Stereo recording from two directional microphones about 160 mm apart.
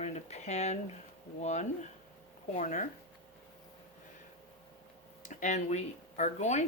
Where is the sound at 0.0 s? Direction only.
45° left (ahead or behind).